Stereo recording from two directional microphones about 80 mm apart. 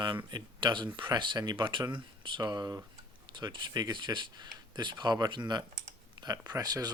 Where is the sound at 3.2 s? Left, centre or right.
Right.